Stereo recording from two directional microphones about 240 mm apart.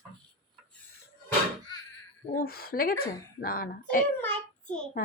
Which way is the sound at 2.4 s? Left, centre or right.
Left.